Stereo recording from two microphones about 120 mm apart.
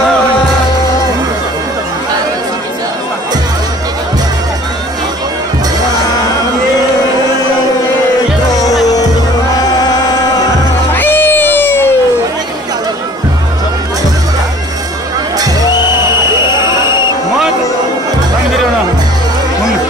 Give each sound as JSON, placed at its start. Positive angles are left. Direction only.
{"t": 9.8, "sound": "music", "side_deg": 35}
{"t": 11.0, "sound": "crowd", "side_deg": 15}